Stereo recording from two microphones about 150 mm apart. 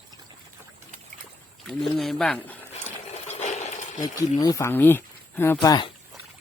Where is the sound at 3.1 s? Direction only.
45° left (ahead or behind).